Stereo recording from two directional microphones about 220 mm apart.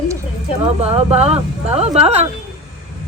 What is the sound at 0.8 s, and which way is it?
Speech, 25° right (ahead or behind).